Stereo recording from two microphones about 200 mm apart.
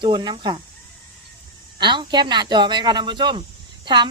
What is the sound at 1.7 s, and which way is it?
A woman's voice, 25° right (ahead or behind).